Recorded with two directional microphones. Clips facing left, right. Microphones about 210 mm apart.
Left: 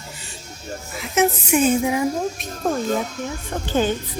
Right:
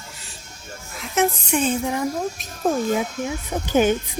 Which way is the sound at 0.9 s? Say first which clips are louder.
Left 2 dB; centre (ahead or behind).